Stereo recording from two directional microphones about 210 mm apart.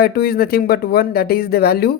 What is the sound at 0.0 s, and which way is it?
Speech, 50° left (ahead or behind).